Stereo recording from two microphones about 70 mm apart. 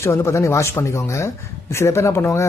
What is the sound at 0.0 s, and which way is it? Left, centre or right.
Speech, left.